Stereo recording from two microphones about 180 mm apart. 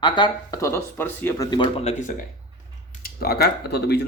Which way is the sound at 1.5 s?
25° left (ahead or behind).